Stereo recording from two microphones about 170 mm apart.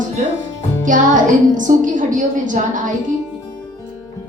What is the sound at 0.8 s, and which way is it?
A woman's voice, 50° right (ahead or behind).